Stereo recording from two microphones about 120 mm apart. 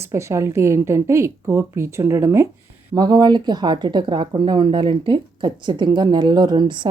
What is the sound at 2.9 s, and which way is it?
Speech, 35° right (ahead or behind).